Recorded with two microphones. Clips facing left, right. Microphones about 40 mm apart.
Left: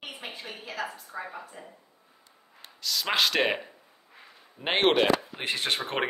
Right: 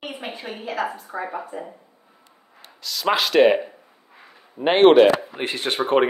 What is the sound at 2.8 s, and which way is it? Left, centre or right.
Speech, centre.